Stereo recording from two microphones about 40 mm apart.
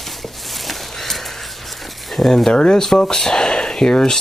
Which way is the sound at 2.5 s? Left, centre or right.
Centre.